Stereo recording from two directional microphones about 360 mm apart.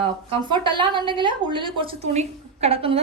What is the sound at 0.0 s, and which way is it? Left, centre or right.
A woman's voice, centre.